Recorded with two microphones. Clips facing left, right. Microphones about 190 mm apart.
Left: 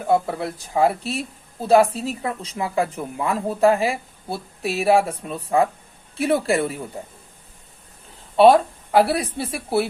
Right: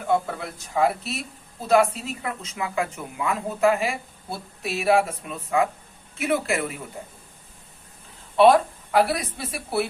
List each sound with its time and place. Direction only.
0.1 s speech: 35° left (ahead or behind)
8.4 s speech: 35° left (ahead or behind)